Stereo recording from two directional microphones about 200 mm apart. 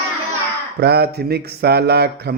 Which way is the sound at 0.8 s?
55° right (ahead or behind).